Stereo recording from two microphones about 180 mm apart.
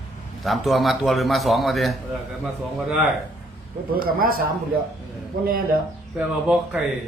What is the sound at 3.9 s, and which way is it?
Speech, 55° right (ahead or behind).